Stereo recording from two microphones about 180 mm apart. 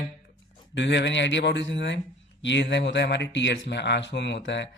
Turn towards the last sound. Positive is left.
turn(degrees=80)